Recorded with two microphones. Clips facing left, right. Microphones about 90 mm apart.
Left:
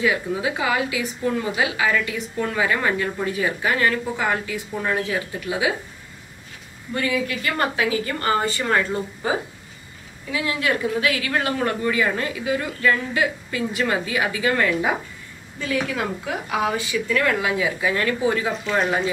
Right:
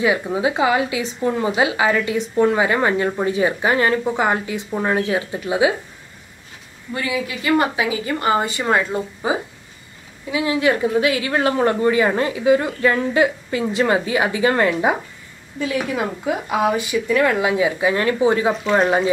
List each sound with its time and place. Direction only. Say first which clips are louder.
0.0 s a woman's voice: right 4 dB; 25° right (ahead or behind)
6.9 s a woman's voice: even; 10° right (ahead or behind); by 15.0 s 30° right (ahead or behind)
15.6 s a woman's voice: right 3 dB; 15° right (ahead or behind); by 19.0 s 35° right (ahead or behind)